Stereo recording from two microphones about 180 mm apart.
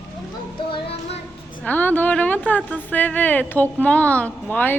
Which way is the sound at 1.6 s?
10° left (ahead or behind).